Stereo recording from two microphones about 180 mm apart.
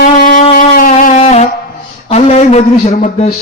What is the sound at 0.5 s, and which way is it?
Music, 50° left (ahead or behind).